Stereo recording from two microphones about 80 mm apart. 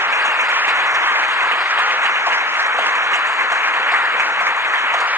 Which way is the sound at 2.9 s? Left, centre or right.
Right.